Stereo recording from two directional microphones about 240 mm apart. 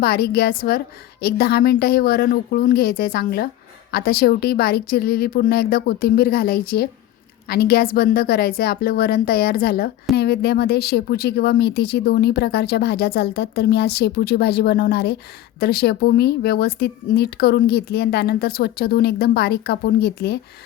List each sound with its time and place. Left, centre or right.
0.0 s speech: left